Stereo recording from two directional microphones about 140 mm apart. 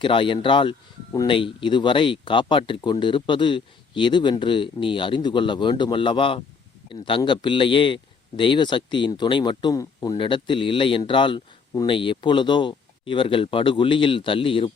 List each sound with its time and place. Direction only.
0.0 s speech: 35° left (ahead or behind)